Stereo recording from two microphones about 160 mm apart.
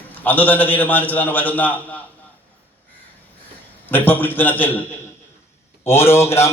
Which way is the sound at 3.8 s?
10° left (ahead or behind).